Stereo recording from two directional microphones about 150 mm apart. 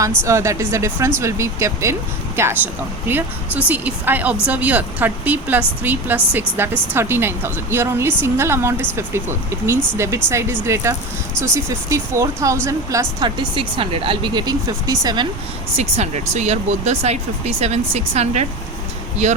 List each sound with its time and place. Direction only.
0.3 s speech: 20° right (ahead or behind)
15.8 s speech: 50° right (ahead or behind)